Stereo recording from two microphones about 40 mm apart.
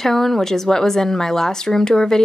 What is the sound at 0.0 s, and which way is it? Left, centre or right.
A woman's voice, centre.